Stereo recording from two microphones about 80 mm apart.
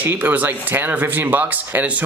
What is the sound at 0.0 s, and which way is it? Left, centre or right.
Speech, right.